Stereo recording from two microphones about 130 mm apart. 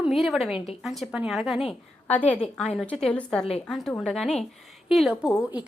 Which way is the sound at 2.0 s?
10° left (ahead or behind).